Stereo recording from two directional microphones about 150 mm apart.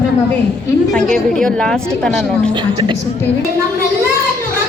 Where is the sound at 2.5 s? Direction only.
35° right (ahead or behind).